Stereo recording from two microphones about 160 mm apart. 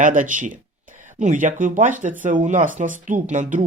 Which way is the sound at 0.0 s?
55° right (ahead or behind).